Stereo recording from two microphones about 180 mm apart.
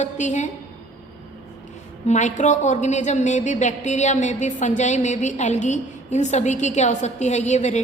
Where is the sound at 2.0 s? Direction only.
40° left (ahead or behind).